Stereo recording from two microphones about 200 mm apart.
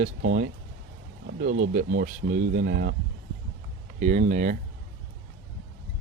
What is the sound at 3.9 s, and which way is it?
Speech, 35° right (ahead or behind).